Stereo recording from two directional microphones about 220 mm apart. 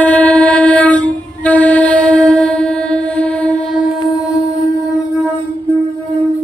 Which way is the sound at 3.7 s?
15° left (ahead or behind).